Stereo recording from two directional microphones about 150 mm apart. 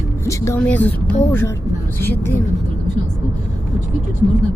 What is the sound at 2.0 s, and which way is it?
Speech, 15° left (ahead or behind).